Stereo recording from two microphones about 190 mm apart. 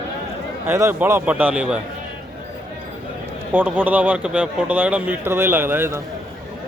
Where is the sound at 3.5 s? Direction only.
10° right (ahead or behind).